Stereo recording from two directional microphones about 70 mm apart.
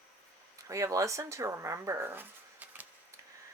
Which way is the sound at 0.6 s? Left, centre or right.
Right.